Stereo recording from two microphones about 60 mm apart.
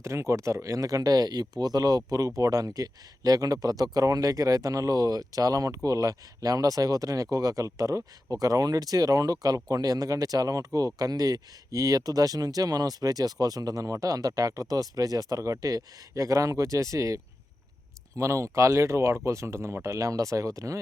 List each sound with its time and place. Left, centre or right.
0.0 s speech: right
18.2 s speech: right